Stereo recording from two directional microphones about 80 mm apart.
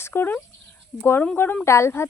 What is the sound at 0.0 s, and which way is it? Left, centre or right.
Speech, left.